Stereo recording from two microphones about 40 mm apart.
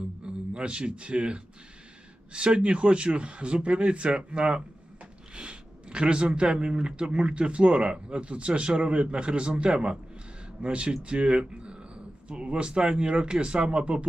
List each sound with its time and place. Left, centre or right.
0.5 s speech: right